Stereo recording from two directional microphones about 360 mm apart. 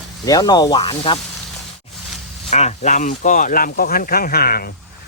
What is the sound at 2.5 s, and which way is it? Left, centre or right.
Speech, centre.